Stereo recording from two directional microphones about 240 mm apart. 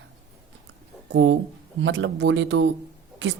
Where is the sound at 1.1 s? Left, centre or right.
Right.